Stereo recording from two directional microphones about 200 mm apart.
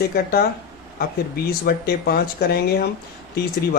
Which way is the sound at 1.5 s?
50° left (ahead or behind).